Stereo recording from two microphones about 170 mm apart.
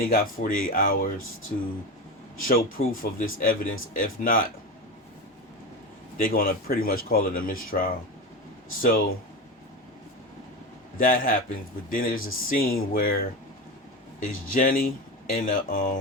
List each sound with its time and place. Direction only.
0.0 s speech: 60° left (ahead or behind)
2.5 s speech: 55° left (ahead or behind)
6.1 s speech: 60° left (ahead or behind)
10.9 s speech: 55° left (ahead or behind)